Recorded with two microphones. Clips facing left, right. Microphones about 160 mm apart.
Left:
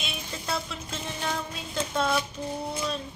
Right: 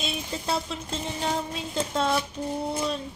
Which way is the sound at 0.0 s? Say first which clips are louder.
Right 5 dB; 30° right (ahead or behind).